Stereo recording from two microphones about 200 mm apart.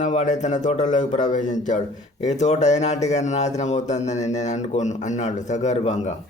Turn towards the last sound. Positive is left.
turn(degrees=35)  # may be behind; listen again after turning